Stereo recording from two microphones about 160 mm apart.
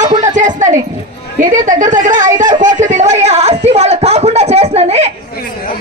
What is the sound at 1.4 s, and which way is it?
A woman's voice, 55° right (ahead or behind).